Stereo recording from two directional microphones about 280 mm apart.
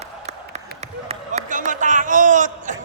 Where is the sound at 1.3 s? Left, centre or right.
Right.